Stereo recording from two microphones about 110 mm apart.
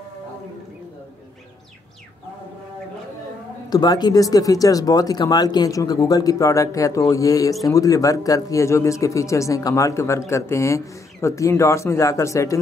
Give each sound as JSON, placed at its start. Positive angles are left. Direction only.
{"t": 3.7, "sound": "speech", "side_deg": 40}